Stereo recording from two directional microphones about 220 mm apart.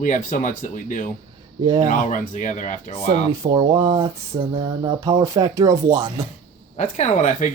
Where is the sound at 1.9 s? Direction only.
35° left (ahead or behind).